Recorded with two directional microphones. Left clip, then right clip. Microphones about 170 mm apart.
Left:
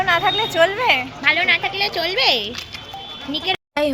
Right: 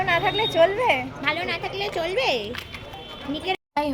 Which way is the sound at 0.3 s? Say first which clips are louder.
Left 3 dB; 10° right (ahead or behind).